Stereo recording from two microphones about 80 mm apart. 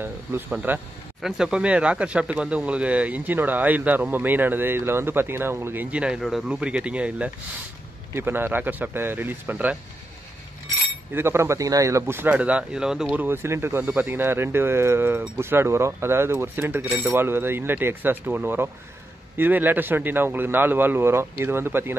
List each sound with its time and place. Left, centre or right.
0.5 s speech: centre
1.2 s speech: centre; by 5.9 s right
5.9 s speech: centre
8.1 s speech: right
11.1 s speech: right
12.4 s speech: centre
13.1 s speech: right